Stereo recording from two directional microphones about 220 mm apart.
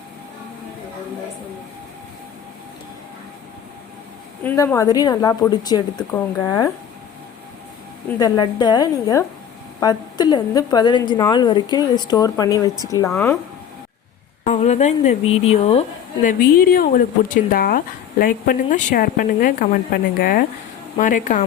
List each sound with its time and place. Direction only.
4.4 s a woman's voice: 10° left (ahead or behind)
8.2 s a woman's voice: 20° left (ahead or behind)
14.4 s speech: 30° left (ahead or behind)
16.2 s speech: 40° left (ahead or behind)